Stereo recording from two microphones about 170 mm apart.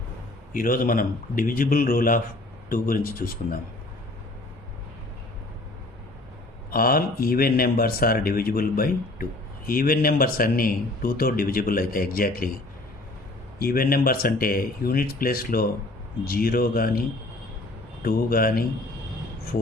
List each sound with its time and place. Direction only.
0.5 s a man's voice: 55° left (ahead or behind)
6.7 s a man's voice: 60° left (ahead or behind)
13.6 s a man's voice: 60° left (ahead or behind)
18.0 s a man's voice: 60° left (ahead or behind)